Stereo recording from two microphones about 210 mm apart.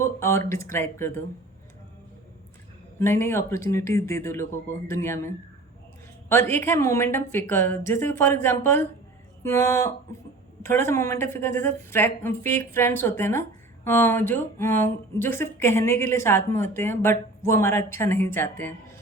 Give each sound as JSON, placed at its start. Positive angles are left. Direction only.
{"t": 0.0, "sound": "speech", "side_deg": 15}
{"t": 3.0, "sound": "speech", "side_deg": 10}